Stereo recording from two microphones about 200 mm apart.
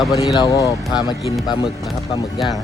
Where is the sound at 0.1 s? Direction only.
15° left (ahead or behind).